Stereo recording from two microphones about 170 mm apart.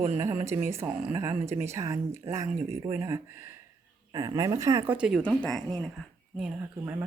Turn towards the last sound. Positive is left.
turn(degrees=-5)  # may be behind; listen again after turning